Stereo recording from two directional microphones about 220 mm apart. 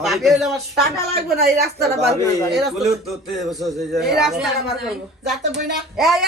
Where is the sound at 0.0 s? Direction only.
Centre (ahead or behind).